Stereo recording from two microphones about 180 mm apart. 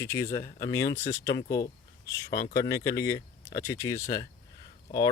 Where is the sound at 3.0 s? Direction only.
15° left (ahead or behind).